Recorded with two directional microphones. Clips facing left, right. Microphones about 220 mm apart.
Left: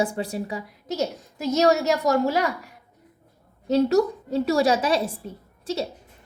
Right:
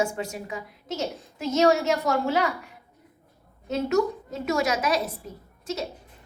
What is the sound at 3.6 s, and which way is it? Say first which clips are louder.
A woman's voice: left 4 dB; 35° left (ahead or behind).